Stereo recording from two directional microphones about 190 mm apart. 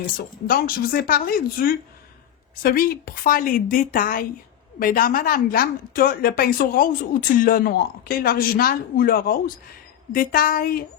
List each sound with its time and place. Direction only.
0.4 s a woman's voice: 50° left (ahead or behind)